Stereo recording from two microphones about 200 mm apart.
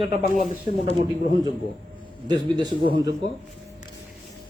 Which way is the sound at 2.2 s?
20° right (ahead or behind).